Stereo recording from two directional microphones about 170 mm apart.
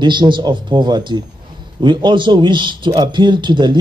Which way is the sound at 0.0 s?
25° right (ahead or behind).